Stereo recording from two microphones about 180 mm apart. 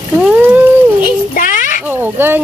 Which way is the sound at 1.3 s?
45° left (ahead or behind).